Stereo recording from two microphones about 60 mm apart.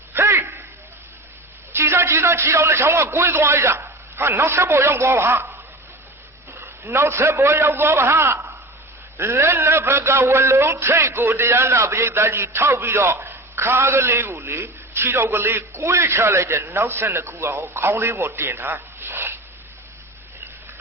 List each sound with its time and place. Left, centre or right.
0.1 s a sound: right
1.7 s a man's voice: right
9.1 s music: right
16.7 s a man's voice: right